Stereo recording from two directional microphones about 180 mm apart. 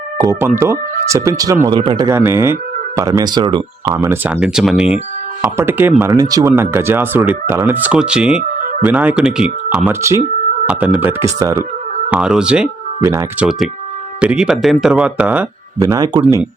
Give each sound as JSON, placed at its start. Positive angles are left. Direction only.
{"t": 0.2, "sound": "speech", "side_deg": -15}
{"t": 8.5, "sound": "music", "side_deg": -50}
{"t": 8.8, "sound": "speech", "side_deg": -10}
{"t": 12.1, "sound": "speech", "side_deg": -5}
{"t": 13.0, "sound": "speech", "side_deg": -15}
{"t": 15.8, "sound": "speech", "side_deg": -20}
{"t": 16.2, "sound": "speech", "side_deg": -10}